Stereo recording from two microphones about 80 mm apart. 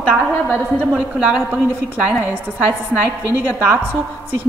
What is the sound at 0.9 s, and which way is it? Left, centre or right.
A woman's voice, centre.